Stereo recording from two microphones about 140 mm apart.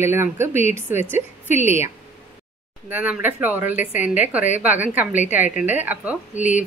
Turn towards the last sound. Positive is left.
turn(degrees=-10)  # may be behind; listen again after turning